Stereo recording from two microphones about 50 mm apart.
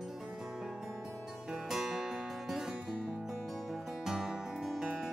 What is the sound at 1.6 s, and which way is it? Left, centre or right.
Music, centre.